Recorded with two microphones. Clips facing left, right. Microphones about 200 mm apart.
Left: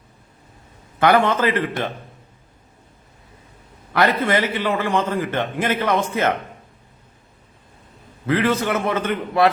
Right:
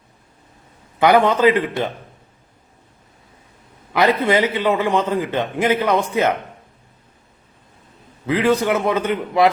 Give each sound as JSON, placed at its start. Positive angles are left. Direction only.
{"t": 0.9, "sound": "a man's voice", "side_deg": -15}
{"t": 4.2, "sound": "a man's voice", "side_deg": -15}
{"t": 8.3, "sound": "a man's voice", "side_deg": -15}